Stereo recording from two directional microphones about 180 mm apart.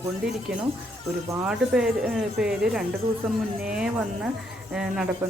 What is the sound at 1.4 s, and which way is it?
A woman's voice, 5° right (ahead or behind).